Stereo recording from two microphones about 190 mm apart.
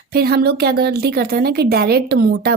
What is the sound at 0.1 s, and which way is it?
Speech, 55° right (ahead or behind).